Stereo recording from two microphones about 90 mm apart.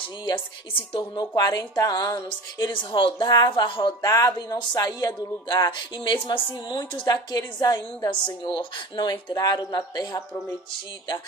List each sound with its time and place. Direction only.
0.7 s a woman's voice: 70° left (ahead or behind)
1.1 s speech: 50° left (ahead or behind)
2.2 s a woman's voice: 55° left (ahead or behind)
3.2 s a woman's voice: 55° left (ahead or behind)
4.0 s speech: 40° left (ahead or behind)
8.5 s speech: 60° left (ahead or behind)